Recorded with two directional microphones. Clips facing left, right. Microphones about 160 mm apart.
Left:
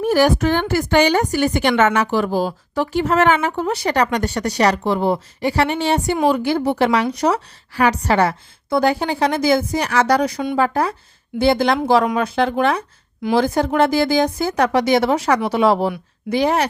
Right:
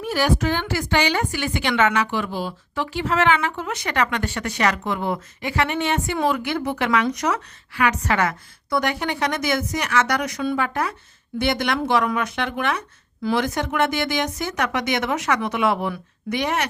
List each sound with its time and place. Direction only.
0.0 s a woman's voice: 45° left (ahead or behind)